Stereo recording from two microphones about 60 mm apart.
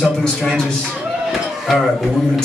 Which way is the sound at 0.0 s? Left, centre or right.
Centre.